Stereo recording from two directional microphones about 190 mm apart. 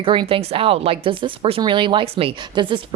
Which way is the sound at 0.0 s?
25° right (ahead or behind).